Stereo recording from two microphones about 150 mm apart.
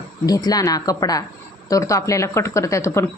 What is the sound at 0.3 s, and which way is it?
Speech, 25° left (ahead or behind).